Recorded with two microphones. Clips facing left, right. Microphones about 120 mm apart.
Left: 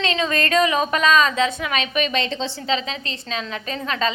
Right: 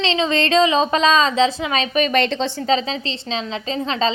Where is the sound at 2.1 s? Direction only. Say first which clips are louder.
Right 5 dB; 65° right (ahead or behind).